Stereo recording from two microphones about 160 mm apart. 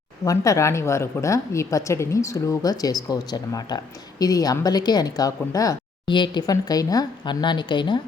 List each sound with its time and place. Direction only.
0.3 s speech: 20° left (ahead or behind)